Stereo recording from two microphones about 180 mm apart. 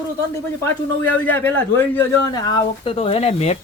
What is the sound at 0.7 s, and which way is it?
A man's voice, 10° left (ahead or behind).